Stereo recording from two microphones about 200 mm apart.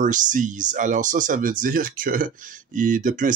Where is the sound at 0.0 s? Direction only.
40° right (ahead or behind).